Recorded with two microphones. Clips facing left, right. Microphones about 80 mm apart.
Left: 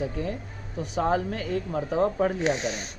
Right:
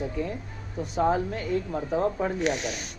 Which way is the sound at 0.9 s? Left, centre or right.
Left.